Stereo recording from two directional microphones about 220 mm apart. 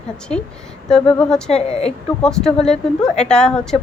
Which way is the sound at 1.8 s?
5° left (ahead or behind).